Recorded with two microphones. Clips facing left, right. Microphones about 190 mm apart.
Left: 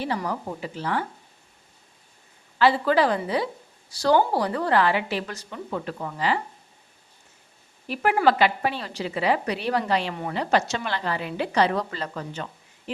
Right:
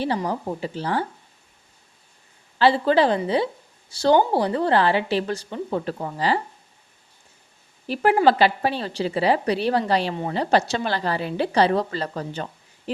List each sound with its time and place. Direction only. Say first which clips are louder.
0.0 s a woman's voice: right 3 dB; 30° right (ahead or behind)
2.6 s a woman's voice: right 2 dB; 30° right (ahead or behind)
7.9 s a woman's voice: right 3 dB; 30° right (ahead or behind)